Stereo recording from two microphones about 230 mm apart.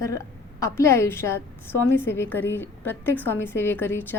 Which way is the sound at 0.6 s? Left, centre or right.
Centre.